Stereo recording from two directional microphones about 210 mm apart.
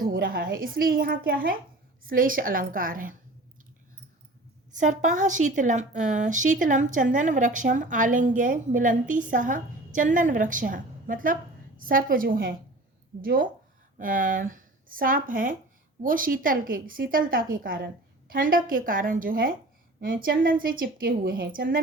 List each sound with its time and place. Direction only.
0.0 s a woman's voice: 45° right (ahead or behind)
4.8 s a woman's voice: 35° right (ahead or behind)